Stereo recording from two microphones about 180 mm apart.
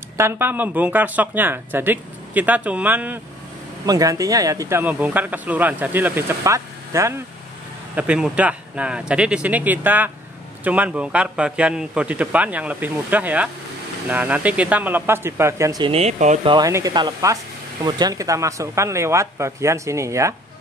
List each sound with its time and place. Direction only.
0.2 s speech: 15° right (ahead or behind)
3.8 s speech: 20° right (ahead or behind)
7.9 s speech: 5° right (ahead or behind)
15.9 s speech: 35° right (ahead or behind)
16.4 s speech: 20° right (ahead or behind)